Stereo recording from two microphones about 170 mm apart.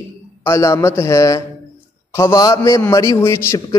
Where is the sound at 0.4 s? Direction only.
15° left (ahead or behind).